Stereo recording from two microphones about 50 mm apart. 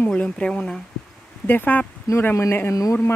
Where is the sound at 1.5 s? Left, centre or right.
Left.